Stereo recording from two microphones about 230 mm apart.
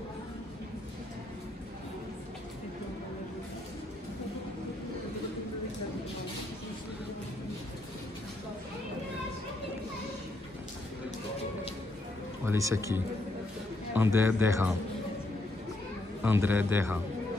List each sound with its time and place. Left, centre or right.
12.4 s a man's voice: centre
16.2 s a man's voice: centre